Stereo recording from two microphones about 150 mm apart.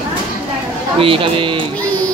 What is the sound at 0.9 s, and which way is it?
Speech, 35° right (ahead or behind).